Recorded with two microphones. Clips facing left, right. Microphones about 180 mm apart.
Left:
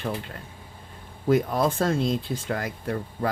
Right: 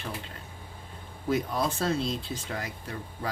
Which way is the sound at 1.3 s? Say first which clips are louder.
Left 6 dB; 50° left (ahead or behind).